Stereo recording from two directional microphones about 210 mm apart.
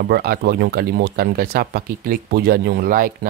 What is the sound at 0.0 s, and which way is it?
Speech, 45° right (ahead or behind).